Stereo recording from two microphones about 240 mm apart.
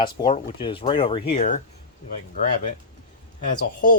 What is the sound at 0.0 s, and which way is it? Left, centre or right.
Speech, centre.